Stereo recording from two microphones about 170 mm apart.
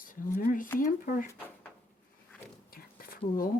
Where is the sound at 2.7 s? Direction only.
60° left (ahead or behind).